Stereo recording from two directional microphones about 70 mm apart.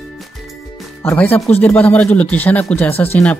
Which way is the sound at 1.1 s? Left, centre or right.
Left.